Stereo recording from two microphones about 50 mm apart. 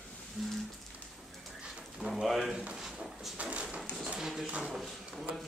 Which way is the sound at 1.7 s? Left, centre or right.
Centre.